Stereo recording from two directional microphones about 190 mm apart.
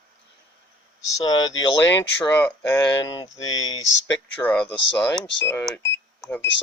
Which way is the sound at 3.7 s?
85° left.